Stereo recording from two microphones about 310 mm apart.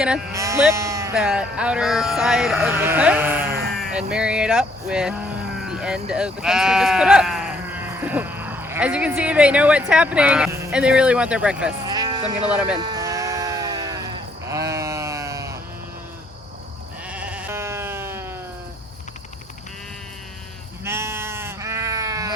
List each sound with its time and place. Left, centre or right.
0.3 s speech: centre
12.8 s sheep: centre
17.1 s sheep: centre
20.8 s sheep: centre